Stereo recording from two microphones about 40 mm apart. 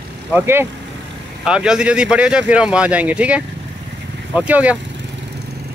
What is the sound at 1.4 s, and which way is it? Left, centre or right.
A man's voice, centre.